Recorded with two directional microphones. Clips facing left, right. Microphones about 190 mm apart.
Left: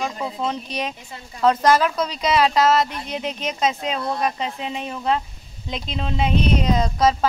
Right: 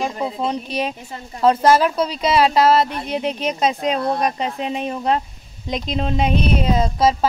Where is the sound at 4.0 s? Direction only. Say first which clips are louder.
Right 3 dB; 45° right (ahead or behind).